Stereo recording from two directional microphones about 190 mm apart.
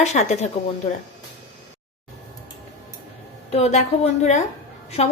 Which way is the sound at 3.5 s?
35° left (ahead or behind).